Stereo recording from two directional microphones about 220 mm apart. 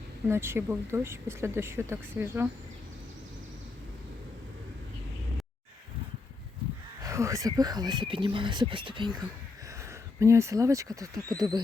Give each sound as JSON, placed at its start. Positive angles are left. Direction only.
{"t": 0.3, "sound": "speech", "side_deg": -10}
{"t": 7.0, "sound": "speech", "side_deg": -15}